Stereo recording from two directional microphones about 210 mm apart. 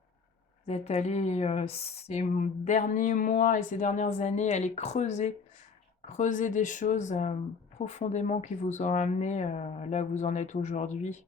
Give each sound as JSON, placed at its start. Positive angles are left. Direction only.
{"t": 0.7, "sound": "speech", "side_deg": 30}